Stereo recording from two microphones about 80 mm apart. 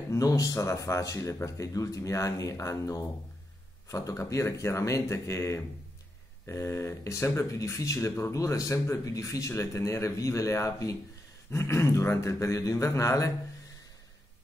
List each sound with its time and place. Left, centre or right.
0.1 s speech: left